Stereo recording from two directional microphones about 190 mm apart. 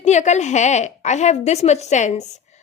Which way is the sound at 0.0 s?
35° left (ahead or behind).